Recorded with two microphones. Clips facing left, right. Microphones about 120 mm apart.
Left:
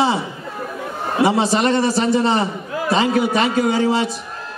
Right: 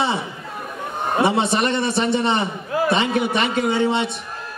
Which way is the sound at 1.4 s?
30° left (ahead or behind).